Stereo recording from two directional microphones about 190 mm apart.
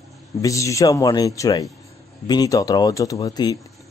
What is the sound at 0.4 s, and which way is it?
Speech, 15° left (ahead or behind).